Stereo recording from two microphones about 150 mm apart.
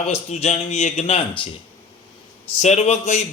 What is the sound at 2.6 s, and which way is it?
Speech, 50° left (ahead or behind).